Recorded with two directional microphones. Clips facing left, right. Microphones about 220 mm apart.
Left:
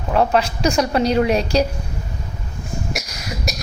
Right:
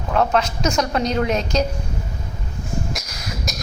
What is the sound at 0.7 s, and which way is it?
Speech, 10° left (ahead or behind).